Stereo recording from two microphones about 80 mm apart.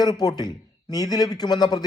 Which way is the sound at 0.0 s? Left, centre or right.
Left.